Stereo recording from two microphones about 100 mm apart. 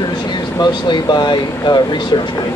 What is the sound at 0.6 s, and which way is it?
Speech, 45° left (ahead or behind).